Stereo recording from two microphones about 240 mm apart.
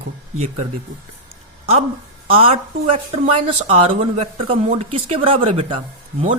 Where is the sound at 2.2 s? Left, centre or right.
Right.